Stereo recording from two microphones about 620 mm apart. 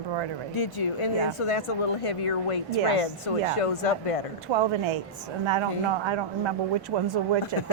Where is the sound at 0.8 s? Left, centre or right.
Left.